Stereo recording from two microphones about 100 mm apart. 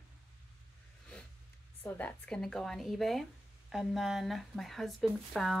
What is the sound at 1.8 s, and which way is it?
Speech, 15° left (ahead or behind).